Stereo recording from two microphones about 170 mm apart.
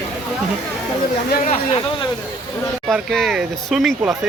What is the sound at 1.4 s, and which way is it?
Speech, 35° left (ahead or behind).